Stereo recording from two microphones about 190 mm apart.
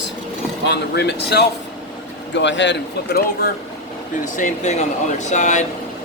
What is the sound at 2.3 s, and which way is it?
Speech, 70° left (ahead or behind).